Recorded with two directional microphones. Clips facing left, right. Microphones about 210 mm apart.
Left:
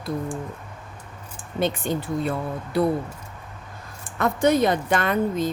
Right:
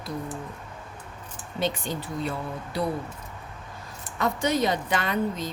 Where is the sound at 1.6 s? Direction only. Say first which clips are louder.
Left 4 dB; 55° left (ahead or behind).